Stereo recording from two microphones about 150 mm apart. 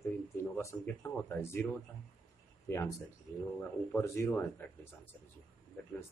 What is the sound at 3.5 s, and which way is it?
Speech, 15° left (ahead or behind).